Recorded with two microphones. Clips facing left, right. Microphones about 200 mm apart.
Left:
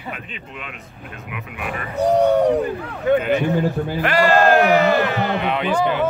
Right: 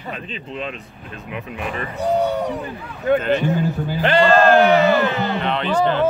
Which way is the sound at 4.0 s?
30° right (ahead or behind).